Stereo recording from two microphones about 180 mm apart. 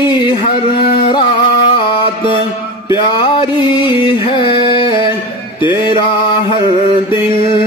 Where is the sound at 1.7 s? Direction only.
30° left (ahead or behind).